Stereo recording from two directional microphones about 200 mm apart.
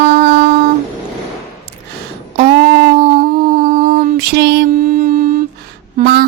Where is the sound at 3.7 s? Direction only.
45° right (ahead or behind).